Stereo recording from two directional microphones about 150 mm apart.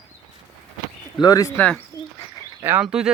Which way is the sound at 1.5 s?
10° left (ahead or behind).